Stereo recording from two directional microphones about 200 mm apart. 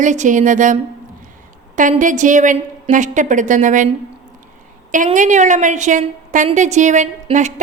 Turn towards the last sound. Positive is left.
turn(degrees=-35)  # may be behind; listen again after turning